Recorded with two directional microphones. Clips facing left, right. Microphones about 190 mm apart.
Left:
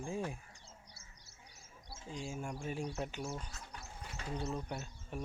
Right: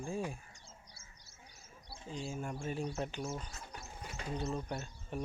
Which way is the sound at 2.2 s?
10° left (ahead or behind).